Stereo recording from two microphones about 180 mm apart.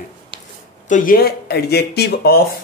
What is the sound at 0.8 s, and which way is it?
Speech, 50° left (ahead or behind).